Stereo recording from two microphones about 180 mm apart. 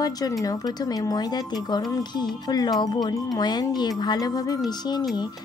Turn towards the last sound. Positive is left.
turn(degrees=25)  # may be behind; listen again after turning